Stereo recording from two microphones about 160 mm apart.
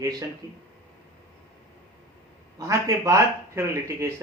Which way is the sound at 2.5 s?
20° right (ahead or behind).